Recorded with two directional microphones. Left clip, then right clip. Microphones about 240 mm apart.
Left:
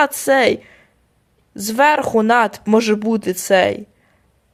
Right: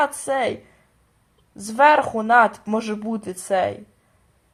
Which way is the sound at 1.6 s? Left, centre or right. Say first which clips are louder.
Left 1 dB; left.